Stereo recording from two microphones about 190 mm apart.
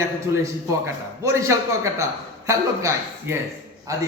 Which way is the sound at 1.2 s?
15° right (ahead or behind).